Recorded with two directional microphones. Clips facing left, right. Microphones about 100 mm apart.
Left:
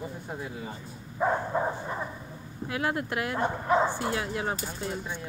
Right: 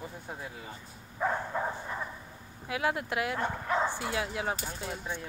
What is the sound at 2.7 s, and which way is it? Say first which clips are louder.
Speech: left 1 dB; 5° right (ahead or behind).